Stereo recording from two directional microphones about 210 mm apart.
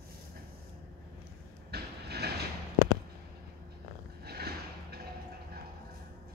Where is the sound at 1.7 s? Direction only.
50° right (ahead or behind).